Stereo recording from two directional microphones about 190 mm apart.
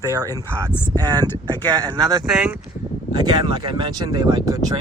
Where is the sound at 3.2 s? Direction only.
20° right (ahead or behind).